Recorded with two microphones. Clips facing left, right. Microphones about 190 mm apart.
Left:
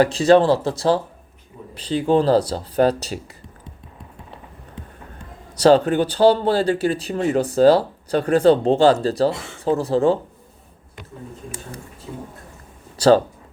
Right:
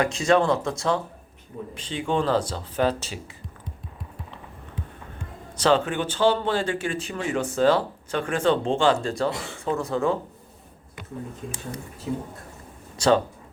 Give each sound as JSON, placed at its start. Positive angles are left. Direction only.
{"t": 0.0, "sound": "speech", "side_deg": 35}
{"t": 5.5, "sound": "speech", "side_deg": 40}
{"t": 13.0, "sound": "speech", "side_deg": 35}